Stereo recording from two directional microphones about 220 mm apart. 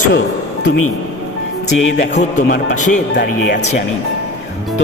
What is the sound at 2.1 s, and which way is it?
Speech, 35° left (ahead or behind).